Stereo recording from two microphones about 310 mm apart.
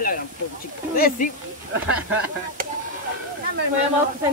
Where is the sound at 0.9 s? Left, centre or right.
Left.